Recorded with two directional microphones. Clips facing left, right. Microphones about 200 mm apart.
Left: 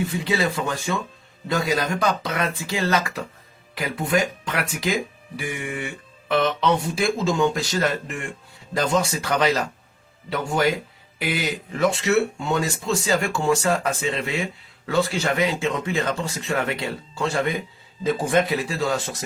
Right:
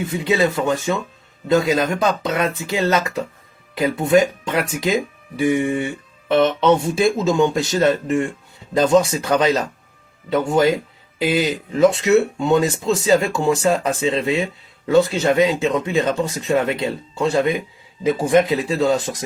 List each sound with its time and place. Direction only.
0.1 s speech: 20° right (ahead or behind)